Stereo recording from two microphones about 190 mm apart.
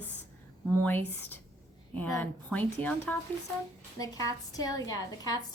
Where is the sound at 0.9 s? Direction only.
10° left (ahead or behind).